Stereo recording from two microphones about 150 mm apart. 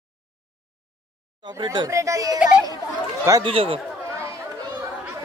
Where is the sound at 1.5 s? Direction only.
30° right (ahead or behind).